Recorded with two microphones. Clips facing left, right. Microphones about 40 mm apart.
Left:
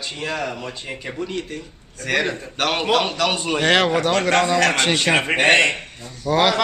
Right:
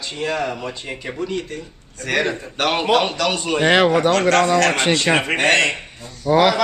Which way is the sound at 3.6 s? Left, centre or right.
Centre.